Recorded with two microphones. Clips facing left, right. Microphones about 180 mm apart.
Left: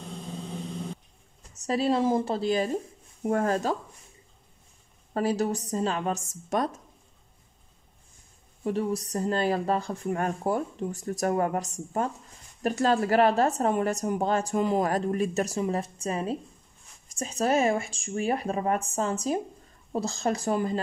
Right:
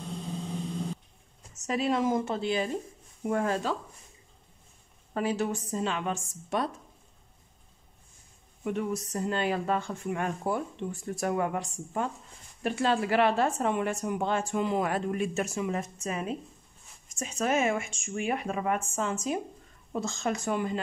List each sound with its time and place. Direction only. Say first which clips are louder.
1.5 s a woman's voice: left 3 dB; 35° left (ahead or behind)
5.1 s a woman's voice: left 3 dB; 40° left (ahead or behind)
8.6 s a woman's voice: left 3 dB; 35° left (ahead or behind)